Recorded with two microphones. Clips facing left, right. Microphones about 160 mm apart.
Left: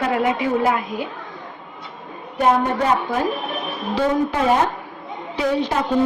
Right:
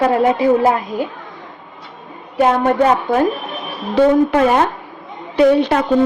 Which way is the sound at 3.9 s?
60° right (ahead or behind).